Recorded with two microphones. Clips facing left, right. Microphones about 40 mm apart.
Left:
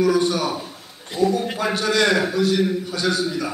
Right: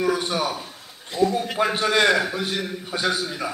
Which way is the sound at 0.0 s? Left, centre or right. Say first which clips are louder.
Left 4 dB; right.